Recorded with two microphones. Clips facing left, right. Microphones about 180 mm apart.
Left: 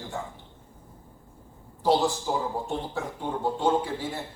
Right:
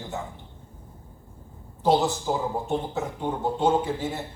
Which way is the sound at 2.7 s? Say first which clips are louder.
Right 4 dB; 20° right (ahead or behind).